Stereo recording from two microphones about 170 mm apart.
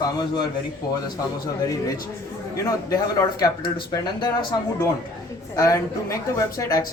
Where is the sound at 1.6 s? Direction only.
20° left (ahead or behind).